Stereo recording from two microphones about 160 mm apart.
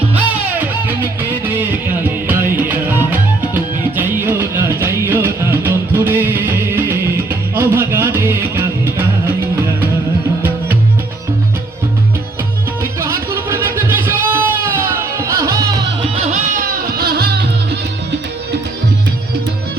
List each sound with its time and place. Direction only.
0.1 s music: 10° right (ahead or behind)
12.8 s music: 15° right (ahead or behind)
16.1 s music: 50° right (ahead or behind); by 17.7 s 85° right